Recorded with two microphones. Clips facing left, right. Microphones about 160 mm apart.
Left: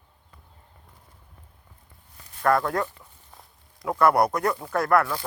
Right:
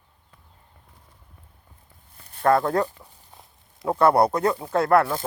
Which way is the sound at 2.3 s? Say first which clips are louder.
Right 3 dB; 30° right (ahead or behind).